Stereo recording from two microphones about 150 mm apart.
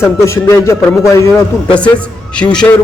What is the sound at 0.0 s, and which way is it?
A man's voice, 15° left (ahead or behind).